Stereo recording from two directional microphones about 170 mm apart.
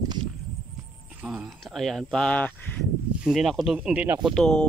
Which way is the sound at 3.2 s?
Centre (ahead or behind).